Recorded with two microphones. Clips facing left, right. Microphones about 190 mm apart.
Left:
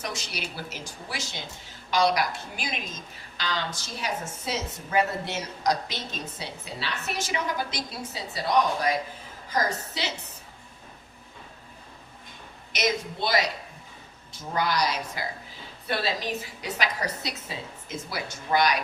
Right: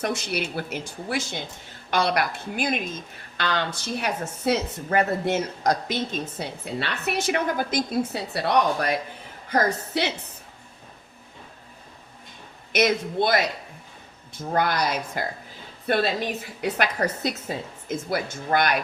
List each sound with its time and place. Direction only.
0.0 s speech: 55° right (ahead or behind)
12.7 s a woman's voice: 55° right (ahead or behind)